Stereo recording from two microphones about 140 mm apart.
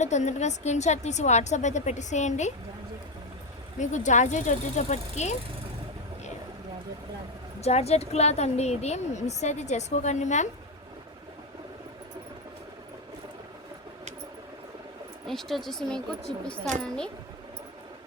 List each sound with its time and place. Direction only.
0.0 s a woman's voice: 55° left (ahead or behind)
3.8 s a woman's voice: 60° left (ahead or behind)
7.6 s a woman's voice: 50° left (ahead or behind)
15.3 s speech: centre (ahead or behind)